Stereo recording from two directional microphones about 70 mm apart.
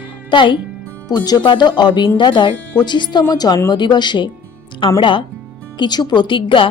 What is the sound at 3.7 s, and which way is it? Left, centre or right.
Speech, left.